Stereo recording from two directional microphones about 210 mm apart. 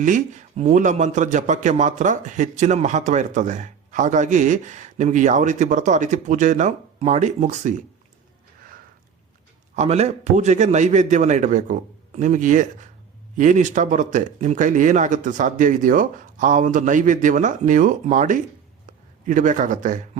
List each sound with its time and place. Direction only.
0.0 s a man's voice: 35° right (ahead or behind)
9.7 s a man's voice: 30° right (ahead or behind)